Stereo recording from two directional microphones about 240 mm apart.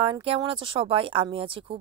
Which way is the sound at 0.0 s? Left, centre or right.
Right.